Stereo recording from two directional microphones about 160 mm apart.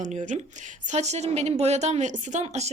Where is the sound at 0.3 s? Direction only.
45° right (ahead or behind).